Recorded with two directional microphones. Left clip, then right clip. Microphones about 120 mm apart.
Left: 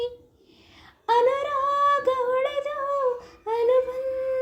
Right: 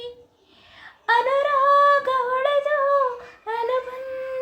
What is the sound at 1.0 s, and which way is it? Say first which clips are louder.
Female singing: right 2 dB; 20° left (ahead or behind).